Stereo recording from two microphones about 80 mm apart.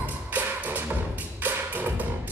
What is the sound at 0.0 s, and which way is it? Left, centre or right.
Music, right.